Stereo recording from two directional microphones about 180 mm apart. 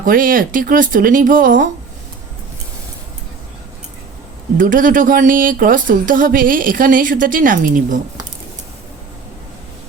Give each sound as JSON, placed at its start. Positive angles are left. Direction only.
{"t": 0.0, "sound": "speech", "side_deg": -50}
{"t": 4.5, "sound": "speech", "side_deg": -50}